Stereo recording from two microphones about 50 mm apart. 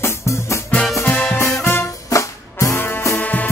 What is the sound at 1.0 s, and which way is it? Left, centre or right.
Music, left.